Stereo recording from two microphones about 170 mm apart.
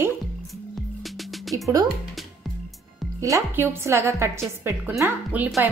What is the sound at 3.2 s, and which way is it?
A woman's voice, 20° right (ahead or behind).